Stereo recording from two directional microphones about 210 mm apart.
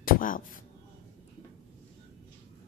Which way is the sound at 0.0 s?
40° left (ahead or behind).